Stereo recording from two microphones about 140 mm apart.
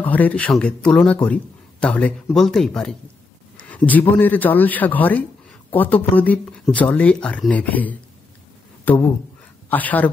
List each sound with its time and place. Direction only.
0.0 s speech: 10° left (ahead or behind)